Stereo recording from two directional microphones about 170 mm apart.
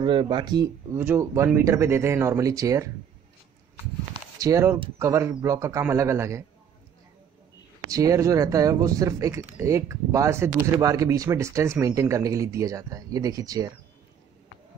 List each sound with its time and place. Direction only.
0.0 s speech: 25° right (ahead or behind)
0.9 s speech: 15° right (ahead or behind)
4.4 s speech: 20° right (ahead or behind)
7.9 s speech: 20° right (ahead or behind)